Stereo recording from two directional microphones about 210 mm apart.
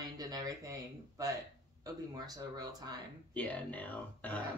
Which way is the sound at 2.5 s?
20° right (ahead or behind).